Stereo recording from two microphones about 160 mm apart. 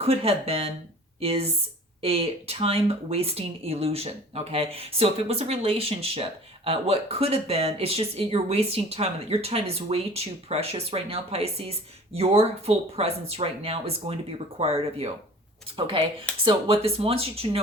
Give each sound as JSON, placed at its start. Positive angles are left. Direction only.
{"t": 0.0, "sound": "speech", "side_deg": -35}